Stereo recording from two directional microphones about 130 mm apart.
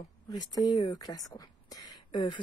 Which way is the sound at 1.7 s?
30° left (ahead or behind).